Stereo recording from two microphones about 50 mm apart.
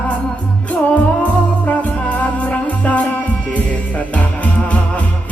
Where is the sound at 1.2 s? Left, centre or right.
Left.